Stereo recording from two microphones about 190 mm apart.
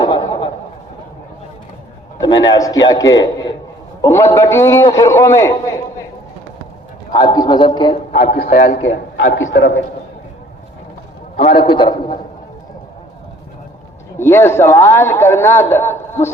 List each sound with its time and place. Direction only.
0.0 s a sound: 20° left (ahead or behind)
2.2 s a man's voice: 25° left (ahead or behind)
7.1 s a man's voice: 25° left (ahead or behind)
8.1 s a man's voice: 45° left (ahead or behind)
8.9 s a man's voice: 90° left
11.3 s a sound: 30° left (ahead or behind)
14.2 s a man's voice: 15° left (ahead or behind)